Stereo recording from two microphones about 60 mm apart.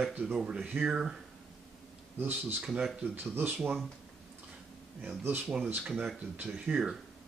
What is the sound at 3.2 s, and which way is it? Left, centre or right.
Speech, right.